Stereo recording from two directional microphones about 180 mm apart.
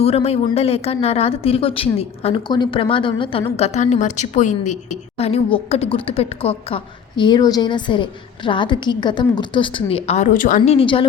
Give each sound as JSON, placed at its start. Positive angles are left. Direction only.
{"t": 0.0, "sound": "a woman's voice", "side_deg": 35}
{"t": 3.6, "sound": "a woman's voice", "side_deg": 40}
{"t": 10.8, "sound": "a woman's voice", "side_deg": 30}